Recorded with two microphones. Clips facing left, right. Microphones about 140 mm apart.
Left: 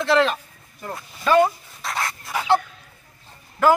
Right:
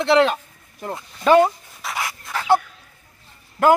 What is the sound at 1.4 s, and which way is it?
Dog, 5° right (ahead or behind).